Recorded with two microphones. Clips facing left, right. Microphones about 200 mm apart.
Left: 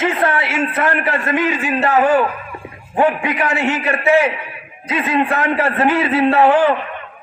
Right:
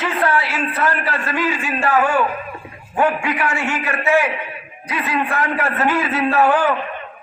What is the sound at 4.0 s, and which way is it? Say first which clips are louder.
A man's voice: left 3 dB; 30° left (ahead or behind).